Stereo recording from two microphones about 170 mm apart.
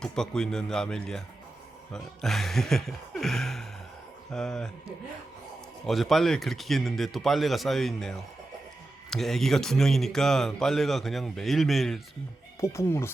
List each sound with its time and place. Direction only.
0.0 s speech: 5° left (ahead or behind)
5.8 s speech: centre (ahead or behind)
12.5 s speech: 15° left (ahead or behind)